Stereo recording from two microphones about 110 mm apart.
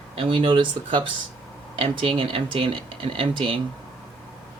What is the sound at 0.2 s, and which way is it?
Speech, 50° right (ahead or behind).